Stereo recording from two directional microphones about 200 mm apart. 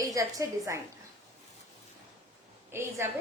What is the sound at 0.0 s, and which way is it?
Speech, 15° right (ahead or behind).